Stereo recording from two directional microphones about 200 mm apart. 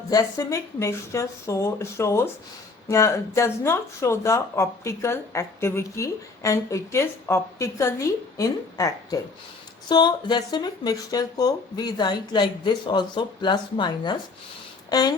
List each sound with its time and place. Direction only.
0.1 s speech: 15° left (ahead or behind)